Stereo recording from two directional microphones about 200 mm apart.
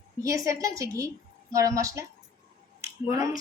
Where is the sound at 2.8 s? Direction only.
15° right (ahead or behind).